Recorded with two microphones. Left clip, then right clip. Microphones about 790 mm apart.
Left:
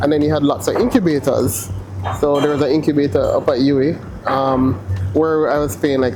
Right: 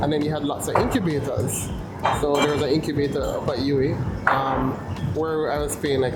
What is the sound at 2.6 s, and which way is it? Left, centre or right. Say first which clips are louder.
Speech: left 7 dB; left.